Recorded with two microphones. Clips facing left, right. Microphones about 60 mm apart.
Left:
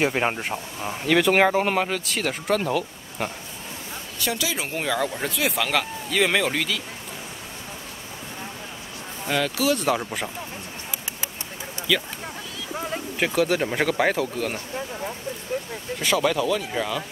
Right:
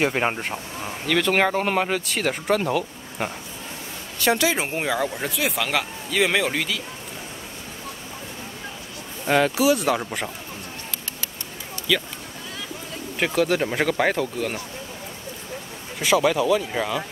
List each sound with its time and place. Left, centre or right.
0.0 s speech: centre
0.8 s speech: centre
4.2 s speech: right
4.6 s speech: right; by 6.8 s centre
9.3 s speech: right
9.8 s speech: centre
11.9 s speech: centre
13.2 s speech: centre
16.0 s speech: centre